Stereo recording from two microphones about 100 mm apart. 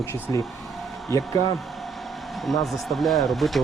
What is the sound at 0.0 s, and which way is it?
Speech, 30° left (ahead or behind).